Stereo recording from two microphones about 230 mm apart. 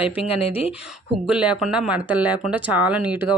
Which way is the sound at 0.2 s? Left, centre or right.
Left.